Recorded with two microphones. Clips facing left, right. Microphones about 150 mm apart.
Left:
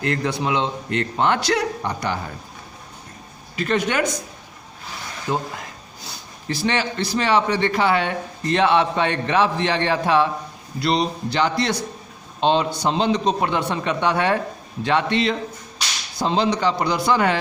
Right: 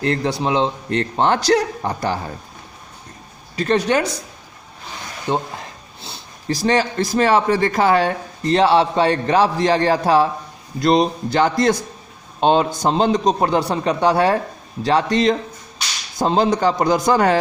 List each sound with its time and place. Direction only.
0.0 s a man's voice: 30° right (ahead or behind)
3.5 s a man's voice: 35° right (ahead or behind)
5.3 s speech: 30° right (ahead or behind)
6.5 s a man's voice: 40° right (ahead or behind)